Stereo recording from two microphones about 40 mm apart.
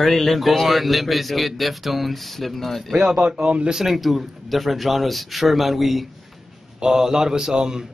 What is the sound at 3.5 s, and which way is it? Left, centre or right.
Speech, right.